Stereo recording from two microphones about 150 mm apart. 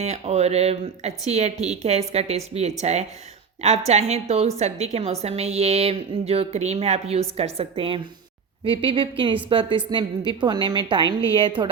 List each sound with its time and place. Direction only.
0.0 s a woman's voice: 45° right (ahead or behind)